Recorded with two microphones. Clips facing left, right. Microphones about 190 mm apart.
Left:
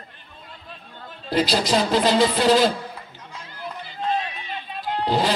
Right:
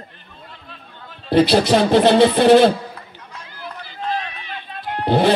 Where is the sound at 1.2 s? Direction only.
60° right (ahead or behind).